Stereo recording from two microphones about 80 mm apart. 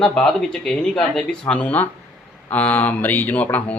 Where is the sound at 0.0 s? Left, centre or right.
Centre.